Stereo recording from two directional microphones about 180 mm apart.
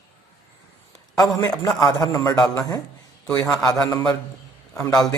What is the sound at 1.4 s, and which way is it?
Speech, 20° left (ahead or behind).